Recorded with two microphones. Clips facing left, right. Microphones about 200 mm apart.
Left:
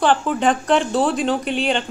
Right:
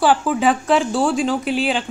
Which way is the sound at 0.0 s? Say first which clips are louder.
Right 1 dB; 5° right (ahead or behind).